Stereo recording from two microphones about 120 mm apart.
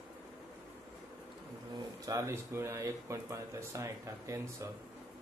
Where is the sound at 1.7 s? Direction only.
30° right (ahead or behind).